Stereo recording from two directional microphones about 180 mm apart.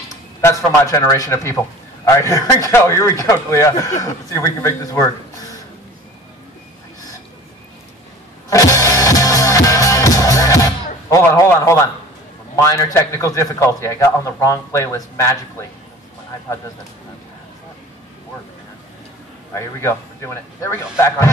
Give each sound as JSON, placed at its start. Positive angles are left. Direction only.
{"t": 0.7, "sound": "a man's voice", "side_deg": 20}
{"t": 8.5, "sound": "music", "side_deg": 20}
{"t": 12.5, "sound": "a man's voice", "side_deg": 15}
{"t": 19.5, "sound": "a man's voice", "side_deg": 15}